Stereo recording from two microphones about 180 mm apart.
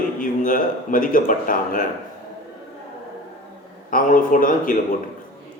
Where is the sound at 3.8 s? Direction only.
50° left (ahead or behind).